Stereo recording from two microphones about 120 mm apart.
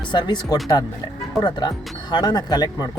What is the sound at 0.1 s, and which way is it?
Speech, 40° left (ahead or behind).